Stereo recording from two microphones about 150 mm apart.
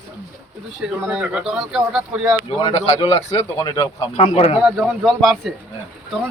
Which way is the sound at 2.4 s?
35° left (ahead or behind).